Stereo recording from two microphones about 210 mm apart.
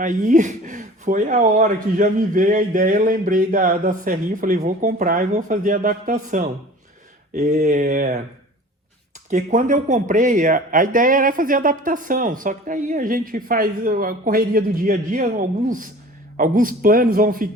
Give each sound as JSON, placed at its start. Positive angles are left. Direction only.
{"t": 0.0, "sound": "speech", "side_deg": -35}
{"t": 9.3, "sound": "speech", "side_deg": -35}